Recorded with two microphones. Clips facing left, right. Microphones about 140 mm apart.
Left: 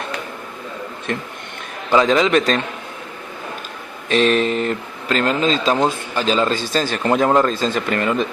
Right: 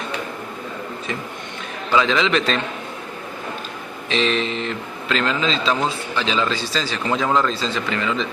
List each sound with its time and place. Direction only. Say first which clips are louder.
2.0 s a man's voice: left 4 dB; 45° left (ahead or behind)
4.1 s a man's voice: left 5 dB; 45° left (ahead or behind)